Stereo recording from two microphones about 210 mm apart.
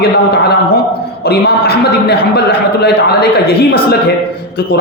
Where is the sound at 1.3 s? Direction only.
50° left (ahead or behind).